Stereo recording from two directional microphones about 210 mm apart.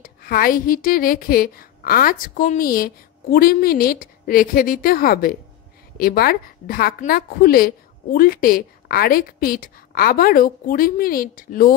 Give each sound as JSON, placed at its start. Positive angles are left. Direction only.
{"t": 0.0, "sound": "a woman's voice", "side_deg": 45}